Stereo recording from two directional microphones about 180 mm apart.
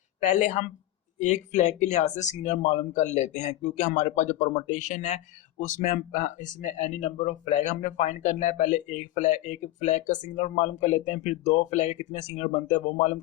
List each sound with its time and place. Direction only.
0.2 s speech: 40° left (ahead or behind)